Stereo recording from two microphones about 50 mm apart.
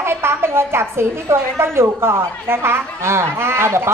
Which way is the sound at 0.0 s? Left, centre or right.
Right.